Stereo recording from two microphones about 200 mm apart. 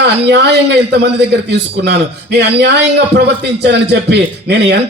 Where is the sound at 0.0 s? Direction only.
60° right (ahead or behind).